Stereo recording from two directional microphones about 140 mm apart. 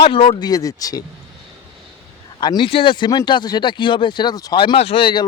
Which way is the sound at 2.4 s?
35° left (ahead or behind).